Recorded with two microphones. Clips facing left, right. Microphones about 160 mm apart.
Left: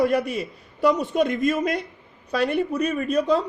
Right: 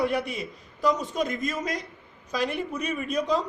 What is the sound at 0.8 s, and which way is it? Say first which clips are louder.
Speech: left 5 dB; 60° left (ahead or behind).